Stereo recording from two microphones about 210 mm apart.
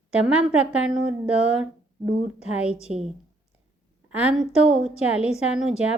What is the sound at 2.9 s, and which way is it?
Speech, 35° right (ahead or behind).